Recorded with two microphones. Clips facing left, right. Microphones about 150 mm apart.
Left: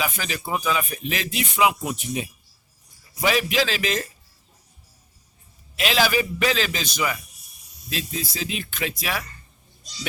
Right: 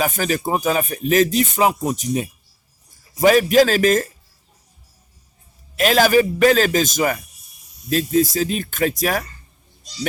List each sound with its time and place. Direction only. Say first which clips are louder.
0.0 s a man's voice: right 8 dB; 45° right (ahead or behind)
5.7 s a man's voice: right 7 dB; 45° right (ahead or behind)